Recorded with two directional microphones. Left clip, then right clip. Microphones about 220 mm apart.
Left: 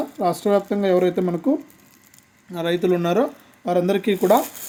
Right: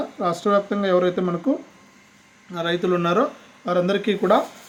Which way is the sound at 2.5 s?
30° left (ahead or behind).